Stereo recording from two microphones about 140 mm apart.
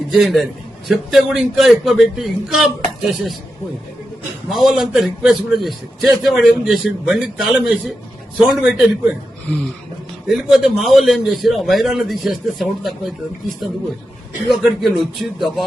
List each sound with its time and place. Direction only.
0.1 s a man's voice: centre (ahead or behind)
4.5 s a man's voice: centre (ahead or behind)
10.2 s a man's voice: centre (ahead or behind)
14.4 s a man's voice: centre (ahead or behind)